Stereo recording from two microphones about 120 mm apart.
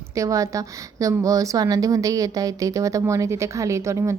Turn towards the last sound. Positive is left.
turn(degrees=-25)  # may be behind; listen again after turning